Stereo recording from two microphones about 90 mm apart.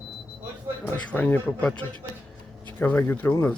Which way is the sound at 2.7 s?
20° left (ahead or behind).